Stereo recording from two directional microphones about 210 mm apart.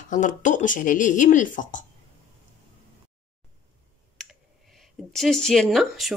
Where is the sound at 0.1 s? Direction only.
35° left (ahead or behind).